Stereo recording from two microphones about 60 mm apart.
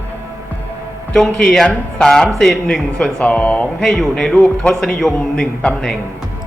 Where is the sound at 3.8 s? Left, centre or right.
Centre.